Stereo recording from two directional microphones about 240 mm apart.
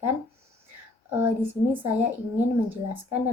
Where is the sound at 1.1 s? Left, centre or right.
Centre.